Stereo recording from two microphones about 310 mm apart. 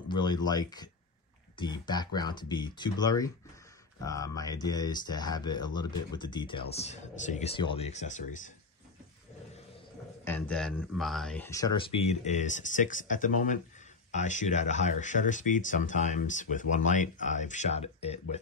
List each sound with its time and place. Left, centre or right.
0.1 s speech: centre
10.2 s speech: centre
12.0 s speech: left